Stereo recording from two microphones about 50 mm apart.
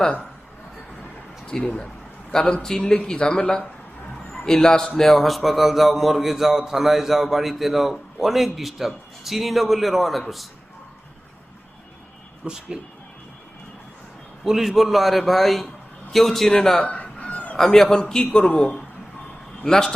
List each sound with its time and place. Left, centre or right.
1.6 s a man's voice: centre
12.5 s speech: centre
14.4 s a man's voice: centre
16.8 s fowl: left
17.6 s speech: centre
18.4 s a man's voice: left
19.6 s speech: centre